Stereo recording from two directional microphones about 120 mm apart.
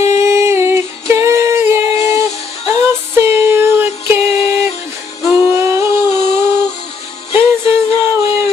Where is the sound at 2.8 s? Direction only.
20° right (ahead or behind).